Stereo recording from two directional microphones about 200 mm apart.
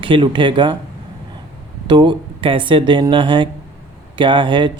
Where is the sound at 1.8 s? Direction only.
25° right (ahead or behind).